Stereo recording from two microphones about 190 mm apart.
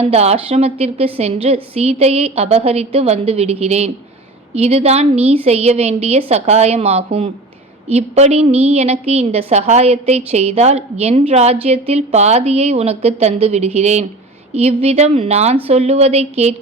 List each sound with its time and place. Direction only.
0.0 s a woman's voice: 35° right (ahead or behind)